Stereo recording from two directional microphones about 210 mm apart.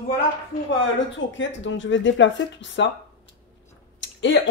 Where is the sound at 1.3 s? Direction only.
60° left (ahead or behind).